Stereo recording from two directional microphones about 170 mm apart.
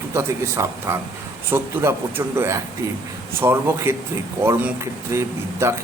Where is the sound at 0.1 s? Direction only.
15° right (ahead or behind).